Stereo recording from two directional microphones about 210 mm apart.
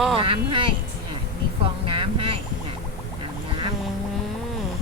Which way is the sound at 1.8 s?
25° right (ahead or behind).